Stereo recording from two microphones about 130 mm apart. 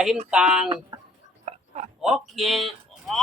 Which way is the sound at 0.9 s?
30° right (ahead or behind).